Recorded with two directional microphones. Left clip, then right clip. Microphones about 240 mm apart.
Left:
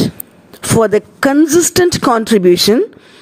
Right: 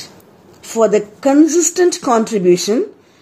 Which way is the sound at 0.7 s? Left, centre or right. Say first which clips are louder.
Left 1 dB; left.